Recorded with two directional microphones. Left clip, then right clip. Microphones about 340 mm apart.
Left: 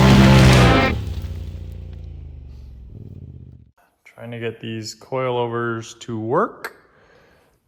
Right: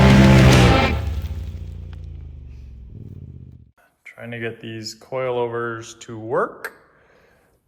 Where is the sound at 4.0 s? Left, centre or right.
Centre.